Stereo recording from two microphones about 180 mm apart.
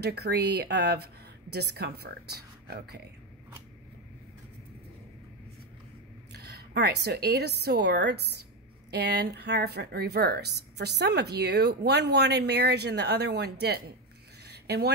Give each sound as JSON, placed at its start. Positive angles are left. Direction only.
{"t": 0.0, "sound": "speech", "side_deg": -65}
{"t": 6.3, "sound": "a woman's voice", "side_deg": -65}
{"t": 14.4, "sound": "a sound", "side_deg": -65}